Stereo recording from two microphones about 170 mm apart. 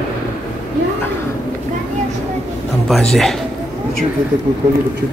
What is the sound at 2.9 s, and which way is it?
Speech, centre (ahead or behind).